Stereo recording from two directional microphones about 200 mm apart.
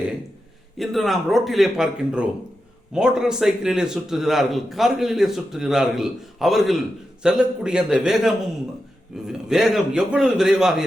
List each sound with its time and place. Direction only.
0.8 s a man's voice: centre (ahead or behind)